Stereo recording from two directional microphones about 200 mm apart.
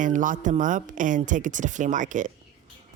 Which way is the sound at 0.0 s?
40° right (ahead or behind).